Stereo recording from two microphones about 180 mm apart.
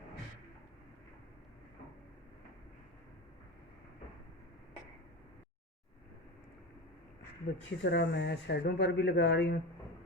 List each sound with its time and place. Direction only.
7.5 s speech: 75° left (ahead or behind)